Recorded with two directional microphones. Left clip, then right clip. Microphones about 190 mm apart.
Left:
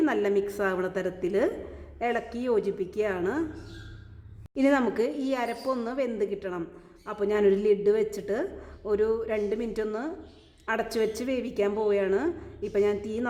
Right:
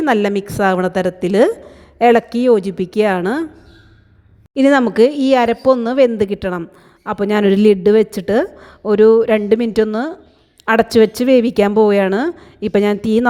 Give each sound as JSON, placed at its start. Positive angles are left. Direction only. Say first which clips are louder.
{"t": 0.0, "sound": "a woman's voice", "louder": "right 9 dB", "side_deg": -40}
{"t": 4.5, "sound": "a woman's voice", "louder": "right 12 dB", "side_deg": -35}